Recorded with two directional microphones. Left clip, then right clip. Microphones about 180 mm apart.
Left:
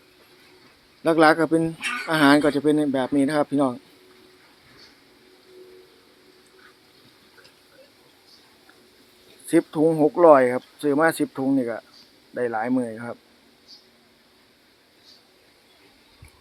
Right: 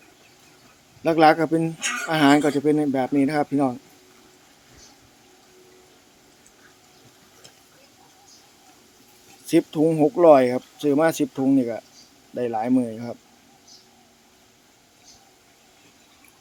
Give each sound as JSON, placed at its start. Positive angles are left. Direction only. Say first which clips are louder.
{"t": 1.0, "sound": "speech", "louder": "right 1 dB", "side_deg": -5}
{"t": 9.5, "sound": "speech", "louder": "even", "side_deg": -10}